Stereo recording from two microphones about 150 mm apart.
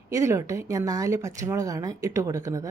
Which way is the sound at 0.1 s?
20° right (ahead or behind).